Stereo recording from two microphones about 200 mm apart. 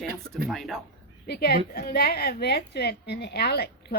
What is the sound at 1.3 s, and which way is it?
A woman's voice, 50° left (ahead or behind).